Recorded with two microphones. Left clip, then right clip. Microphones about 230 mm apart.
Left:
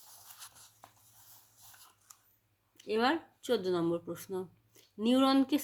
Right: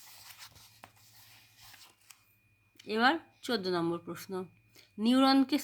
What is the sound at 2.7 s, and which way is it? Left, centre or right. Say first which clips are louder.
Speech: right 2 dB; right.